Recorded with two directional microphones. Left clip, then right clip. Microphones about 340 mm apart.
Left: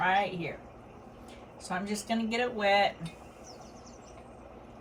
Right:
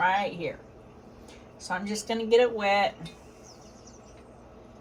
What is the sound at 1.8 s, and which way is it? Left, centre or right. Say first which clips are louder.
Speech: right 2 dB; centre.